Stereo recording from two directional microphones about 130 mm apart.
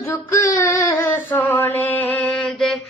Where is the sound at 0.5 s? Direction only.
20° left (ahead or behind); by 2.7 s centre (ahead or behind).